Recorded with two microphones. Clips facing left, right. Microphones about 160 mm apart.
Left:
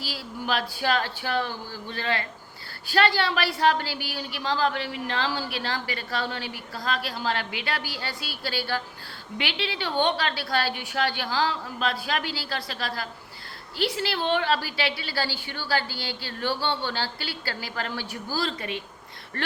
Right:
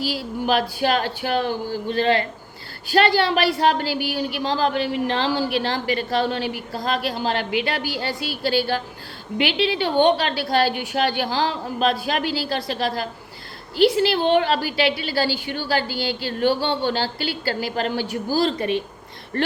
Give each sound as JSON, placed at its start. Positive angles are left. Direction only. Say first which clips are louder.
{"t": 0.0, "sound": "a woman's voice", "louder": "right 9 dB", "side_deg": -15}
{"t": 2.8, "sound": "a woman's voice", "louder": "right 5 dB", "side_deg": -15}